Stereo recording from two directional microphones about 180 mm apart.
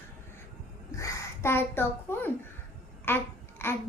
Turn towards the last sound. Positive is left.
turn(degrees=10)  # may be behind; listen again after turning